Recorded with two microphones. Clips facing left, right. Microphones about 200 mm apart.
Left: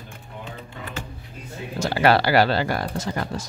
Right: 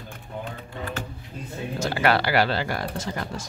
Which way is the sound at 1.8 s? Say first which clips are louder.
Left 4 dB; 35° left (ahead or behind).